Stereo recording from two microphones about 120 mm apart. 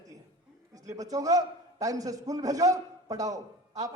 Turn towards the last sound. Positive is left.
turn(degrees=-30)  # may be behind; listen again after turning